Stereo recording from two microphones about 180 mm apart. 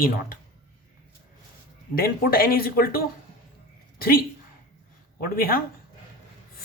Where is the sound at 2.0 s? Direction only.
55° left (ahead or behind).